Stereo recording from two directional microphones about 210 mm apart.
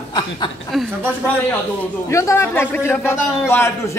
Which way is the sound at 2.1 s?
15° left (ahead or behind).